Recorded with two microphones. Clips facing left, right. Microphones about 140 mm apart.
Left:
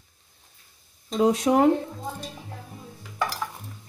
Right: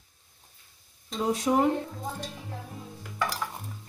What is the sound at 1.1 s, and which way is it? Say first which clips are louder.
Speech: left 5 dB; 85° left.